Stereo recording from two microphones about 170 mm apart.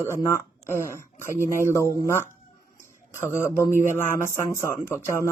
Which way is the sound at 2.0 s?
15° left (ahead or behind).